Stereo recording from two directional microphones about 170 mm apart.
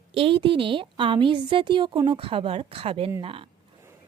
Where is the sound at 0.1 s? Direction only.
30° right (ahead or behind).